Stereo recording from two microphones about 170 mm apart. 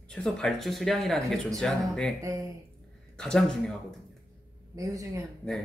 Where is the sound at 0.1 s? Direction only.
5° left (ahead or behind).